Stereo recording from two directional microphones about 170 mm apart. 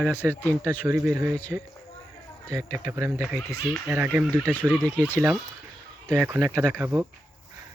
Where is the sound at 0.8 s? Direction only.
15° right (ahead or behind).